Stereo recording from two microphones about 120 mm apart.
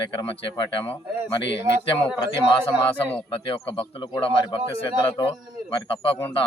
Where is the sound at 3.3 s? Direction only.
45° left (ahead or behind).